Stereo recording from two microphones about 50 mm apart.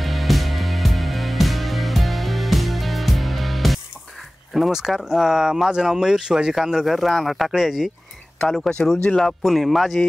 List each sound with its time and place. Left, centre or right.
0.0 s music: centre
4.6 s speech: centre
8.4 s speech: centre
9.4 s speech: centre